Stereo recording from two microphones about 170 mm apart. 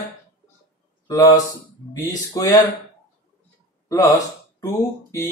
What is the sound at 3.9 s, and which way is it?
Speech, 20° left (ahead or behind).